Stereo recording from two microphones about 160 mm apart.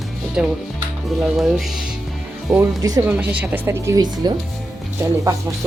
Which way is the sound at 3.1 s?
10° right (ahead or behind).